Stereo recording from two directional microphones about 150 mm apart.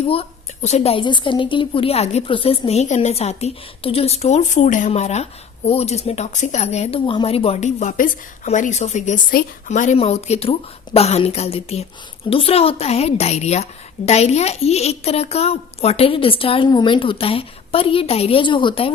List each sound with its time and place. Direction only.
0.1 s a woman's voice: 40° left (ahead or behind)
10.0 s a woman's voice: 45° left (ahead or behind)